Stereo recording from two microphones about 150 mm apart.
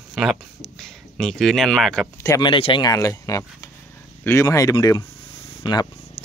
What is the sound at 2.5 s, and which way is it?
Speech, 35° left (ahead or behind).